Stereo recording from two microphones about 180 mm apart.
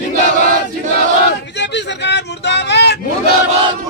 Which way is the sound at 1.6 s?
75° left (ahead or behind).